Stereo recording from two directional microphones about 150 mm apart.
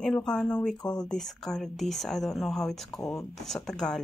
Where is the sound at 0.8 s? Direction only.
25° left (ahead or behind).